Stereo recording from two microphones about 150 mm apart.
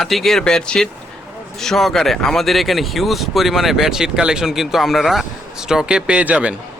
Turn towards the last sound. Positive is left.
turn(degrees=-10)  # may be behind; listen again after turning